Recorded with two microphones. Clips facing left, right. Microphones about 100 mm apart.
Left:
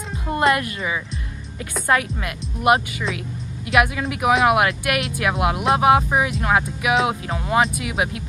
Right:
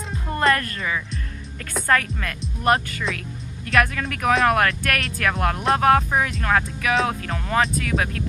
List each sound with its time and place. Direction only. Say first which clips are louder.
0.6 s speech: left 2 dB; 15° left (ahead or behind)